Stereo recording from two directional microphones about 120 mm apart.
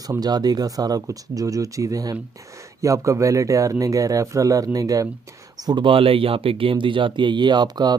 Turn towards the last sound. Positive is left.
turn(degrees=-35)  # may be behind; listen again after turning